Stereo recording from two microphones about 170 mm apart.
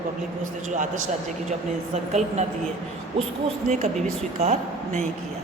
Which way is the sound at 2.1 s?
40° right (ahead or behind).